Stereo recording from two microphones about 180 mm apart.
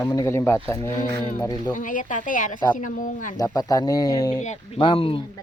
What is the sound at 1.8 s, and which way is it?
A woman's voice, 45° left (ahead or behind).